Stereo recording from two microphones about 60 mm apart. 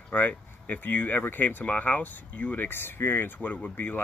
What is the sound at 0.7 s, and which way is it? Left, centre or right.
Speech, left.